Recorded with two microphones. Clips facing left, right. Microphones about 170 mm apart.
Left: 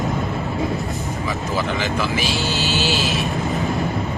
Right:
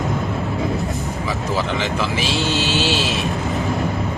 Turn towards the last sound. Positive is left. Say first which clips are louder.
# right 1 dB
turn(degrees=0)  # may be behind; listen again after turning